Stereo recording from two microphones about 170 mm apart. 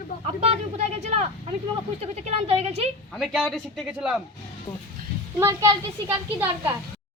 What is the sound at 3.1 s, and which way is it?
Speech, centre (ahead or behind).